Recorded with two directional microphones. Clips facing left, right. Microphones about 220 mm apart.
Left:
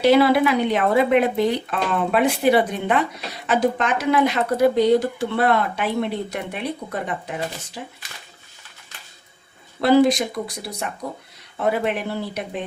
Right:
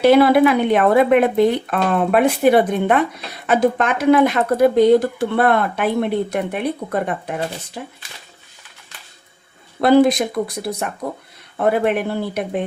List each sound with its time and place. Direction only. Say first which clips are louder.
0.0 s speech: right 4 dB; 55° right (ahead or behind)
9.8 s speech: right 3 dB; 55° right (ahead or behind)